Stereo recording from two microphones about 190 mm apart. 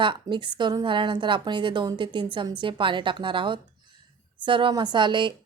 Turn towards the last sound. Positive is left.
turn(degrees=-25)  # may be behind; listen again after turning